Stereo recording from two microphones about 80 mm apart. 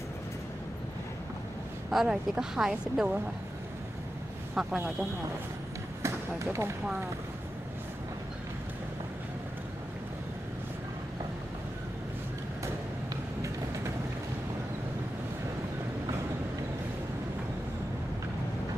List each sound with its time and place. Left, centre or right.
1.9 s speech: centre
4.6 s speech: centre
6.0 s speech: right
13.1 s vehicle: right